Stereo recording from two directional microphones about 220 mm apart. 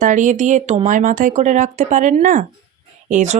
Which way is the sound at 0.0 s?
35° right (ahead or behind).